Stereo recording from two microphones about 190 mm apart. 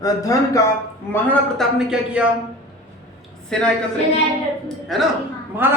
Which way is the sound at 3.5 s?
5° left (ahead or behind).